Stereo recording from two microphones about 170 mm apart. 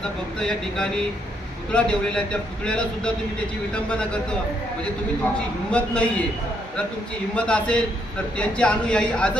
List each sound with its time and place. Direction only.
0.3 s a man's voice: 5° left (ahead or behind)
5.7 s a man's voice: 5° left (ahead or behind)
7.3 s a man's voice: 5° left (ahead or behind)